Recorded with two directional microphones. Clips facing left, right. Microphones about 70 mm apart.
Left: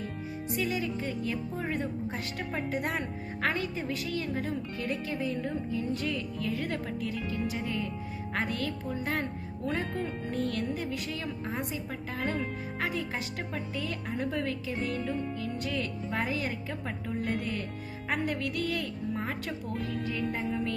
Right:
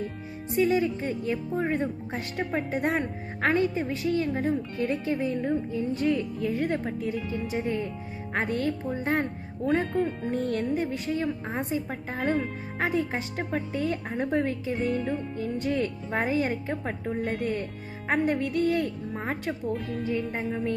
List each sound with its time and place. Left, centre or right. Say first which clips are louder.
0.5 s a woman's voice: right 9 dB; right